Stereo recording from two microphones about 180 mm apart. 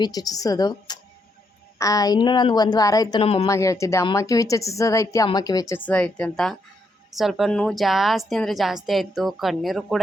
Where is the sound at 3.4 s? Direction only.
15° left (ahead or behind).